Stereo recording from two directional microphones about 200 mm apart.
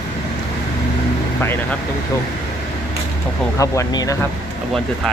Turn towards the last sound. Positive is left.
turn(degrees=15)  # may be behind; listen again after turning